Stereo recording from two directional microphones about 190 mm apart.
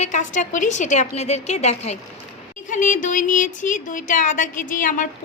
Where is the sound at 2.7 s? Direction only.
40° left (ahead or behind).